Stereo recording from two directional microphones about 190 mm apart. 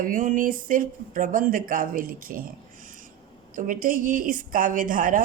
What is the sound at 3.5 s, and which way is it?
A woman's voice, 45° right (ahead or behind).